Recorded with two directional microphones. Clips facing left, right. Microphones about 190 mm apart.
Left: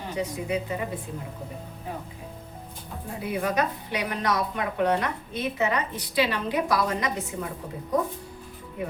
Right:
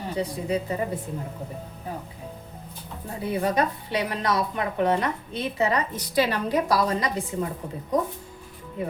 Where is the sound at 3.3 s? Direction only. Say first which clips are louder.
Right 2 dB; 30° right (ahead or behind).